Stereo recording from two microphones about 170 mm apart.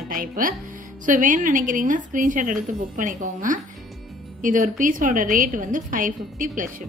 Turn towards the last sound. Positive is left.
turn(degrees=-50)  # may be behind; listen again after turning